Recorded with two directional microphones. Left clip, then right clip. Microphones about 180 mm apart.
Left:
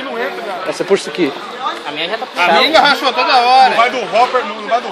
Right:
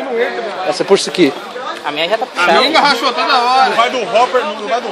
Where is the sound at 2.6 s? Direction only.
5° right (ahead or behind).